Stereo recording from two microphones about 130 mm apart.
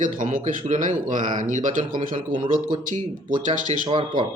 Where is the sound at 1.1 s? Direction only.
70° right (ahead or behind).